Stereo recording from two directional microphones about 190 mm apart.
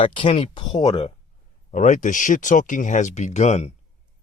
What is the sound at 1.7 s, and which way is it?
Speech, 40° left (ahead or behind).